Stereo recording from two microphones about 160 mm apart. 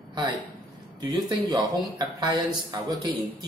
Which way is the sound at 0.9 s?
25° right (ahead or behind).